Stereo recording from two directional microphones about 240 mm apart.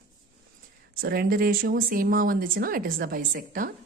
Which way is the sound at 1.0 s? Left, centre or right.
Right.